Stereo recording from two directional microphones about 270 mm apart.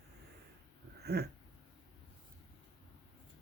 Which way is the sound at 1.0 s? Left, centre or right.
Right.